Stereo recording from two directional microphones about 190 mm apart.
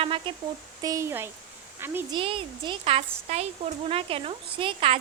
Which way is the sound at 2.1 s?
25° right (ahead or behind).